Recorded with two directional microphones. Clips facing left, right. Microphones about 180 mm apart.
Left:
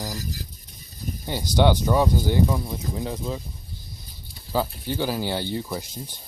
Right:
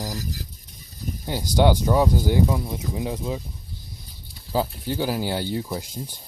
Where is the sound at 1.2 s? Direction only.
10° right (ahead or behind).